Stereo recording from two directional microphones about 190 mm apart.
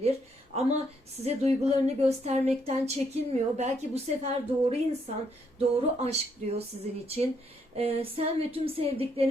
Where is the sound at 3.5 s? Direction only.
35° right (ahead or behind).